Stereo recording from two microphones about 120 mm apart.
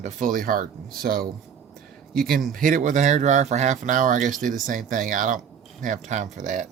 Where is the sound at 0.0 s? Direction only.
90° right.